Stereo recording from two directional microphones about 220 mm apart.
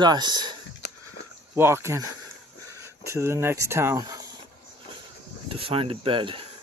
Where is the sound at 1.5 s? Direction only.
10° right (ahead or behind).